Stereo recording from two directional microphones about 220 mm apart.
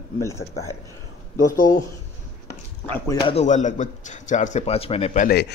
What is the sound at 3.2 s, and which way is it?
Speech, 30° left (ahead or behind).